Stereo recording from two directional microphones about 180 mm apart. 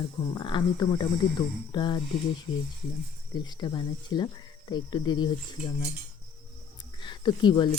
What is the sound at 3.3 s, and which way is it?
Speech, 25° left (ahead or behind).